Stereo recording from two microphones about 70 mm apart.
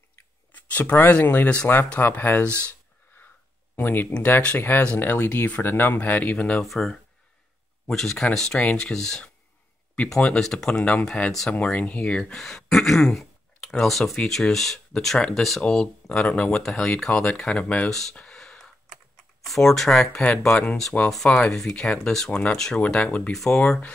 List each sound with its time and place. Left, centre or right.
0.5 s speech: left
3.7 s speech: left
6.6 s speech: centre
15.1 s speech: centre
17.8 s speech: centre
18.1 s a sound: centre
19.4 s speech: centre
21.5 s speech: centre
22.3 s speech: centre
22.8 s speech: centre